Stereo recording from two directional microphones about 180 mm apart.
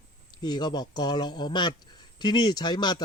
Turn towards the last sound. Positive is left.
turn(degrees=25)  # may be behind; listen again after turning